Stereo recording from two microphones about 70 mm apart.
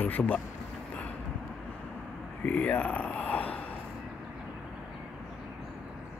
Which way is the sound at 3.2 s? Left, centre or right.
Centre.